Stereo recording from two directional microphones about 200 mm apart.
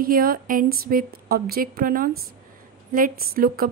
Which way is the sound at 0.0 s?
45° right (ahead or behind).